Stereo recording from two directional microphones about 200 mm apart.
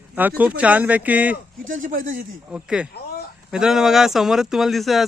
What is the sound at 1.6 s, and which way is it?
Speech, 40° right (ahead or behind).